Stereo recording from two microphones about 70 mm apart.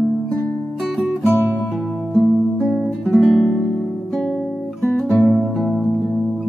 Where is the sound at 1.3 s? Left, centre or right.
Right.